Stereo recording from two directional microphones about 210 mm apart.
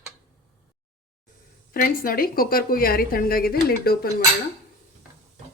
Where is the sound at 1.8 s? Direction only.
45° left (ahead or behind).